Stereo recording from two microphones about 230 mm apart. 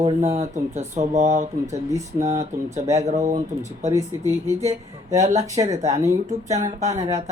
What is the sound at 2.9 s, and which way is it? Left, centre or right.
Speech, right.